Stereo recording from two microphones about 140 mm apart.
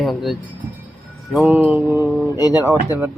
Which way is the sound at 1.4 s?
10° right (ahead or behind).